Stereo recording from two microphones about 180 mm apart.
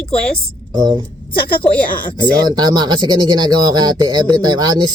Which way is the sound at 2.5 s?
25° right (ahead or behind).